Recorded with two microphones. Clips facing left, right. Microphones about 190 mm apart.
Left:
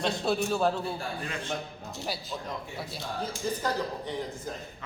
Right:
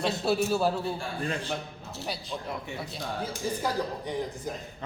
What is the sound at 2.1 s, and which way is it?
Speech, 5° left (ahead or behind).